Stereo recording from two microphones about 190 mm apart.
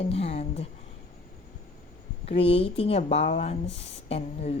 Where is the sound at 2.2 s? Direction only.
30° left (ahead or behind).